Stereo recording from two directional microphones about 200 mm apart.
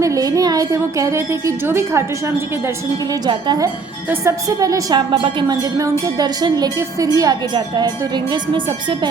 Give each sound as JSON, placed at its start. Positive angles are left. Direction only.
{"t": 0.0, "sound": "a woman's voice", "side_deg": -15}
{"t": 3.2, "sound": "a woman's voice", "side_deg": -20}